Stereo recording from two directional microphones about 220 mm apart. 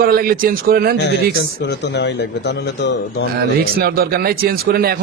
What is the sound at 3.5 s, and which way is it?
A man's voice, 45° right (ahead or behind).